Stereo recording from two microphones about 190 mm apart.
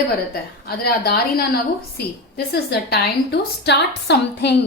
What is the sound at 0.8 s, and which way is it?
A woman's voice, 55° left (ahead or behind).